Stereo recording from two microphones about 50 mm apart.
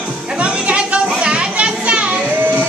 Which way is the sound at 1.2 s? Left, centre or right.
Right.